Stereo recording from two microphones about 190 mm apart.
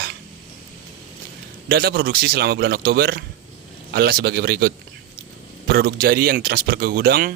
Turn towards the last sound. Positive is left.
turn(degrees=-50)  # may be behind; listen again after turning